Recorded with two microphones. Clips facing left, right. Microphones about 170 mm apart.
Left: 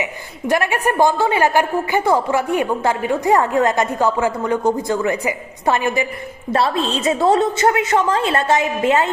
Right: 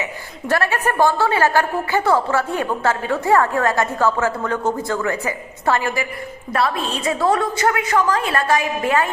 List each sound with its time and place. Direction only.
0.0 s a woman's voice: 15° left (ahead or behind)